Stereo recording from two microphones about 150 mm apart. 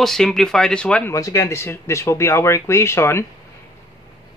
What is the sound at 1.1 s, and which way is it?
Speech, 20° left (ahead or behind).